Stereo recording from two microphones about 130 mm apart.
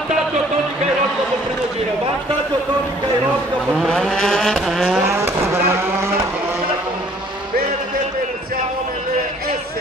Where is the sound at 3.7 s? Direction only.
5° left (ahead or behind).